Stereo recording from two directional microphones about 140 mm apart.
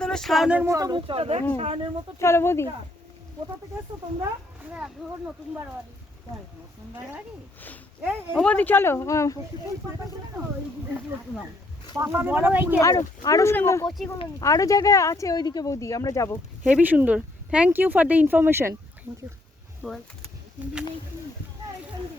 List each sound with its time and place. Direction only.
0.0 s speech: 5° left (ahead or behind)
0.6 s speech: 25° right (ahead or behind); by 1.9 s 45° right (ahead or behind)
2.1 s speech: 20° left (ahead or behind)
4.7 s speech: 10° right (ahead or behind)
8.0 s speech: 15° right (ahead or behind)
8.4 s speech: 10° left (ahead or behind)
11.9 s speech: 15° right (ahead or behind)
12.8 s speech: 25° left (ahead or behind)
16.6 s speech: 10° right (ahead or behind)
19.8 s speech: centre (ahead or behind)